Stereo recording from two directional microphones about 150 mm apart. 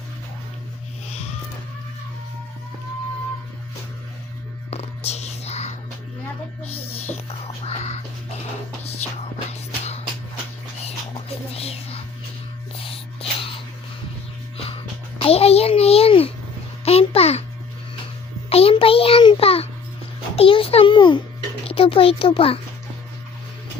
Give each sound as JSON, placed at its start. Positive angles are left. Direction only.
{"t": 1.0, "sound": "music", "side_deg": 45}
{"t": 4.7, "sound": "whispering", "side_deg": 45}
{"t": 6.7, "sound": "music", "side_deg": 40}
{"t": 9.5, "sound": "music", "side_deg": 45}
{"t": 11.5, "sound": "whispering", "side_deg": 40}
{"t": 15.2, "sound": "a sound", "side_deg": 40}
{"t": 18.4, "sound": "a sound", "side_deg": 40}